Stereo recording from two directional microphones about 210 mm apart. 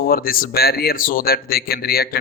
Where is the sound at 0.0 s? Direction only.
45° left (ahead or behind).